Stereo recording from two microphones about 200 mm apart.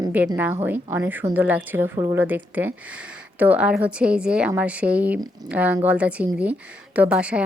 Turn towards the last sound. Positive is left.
turn(degrees=-5)  # may be behind; listen again after turning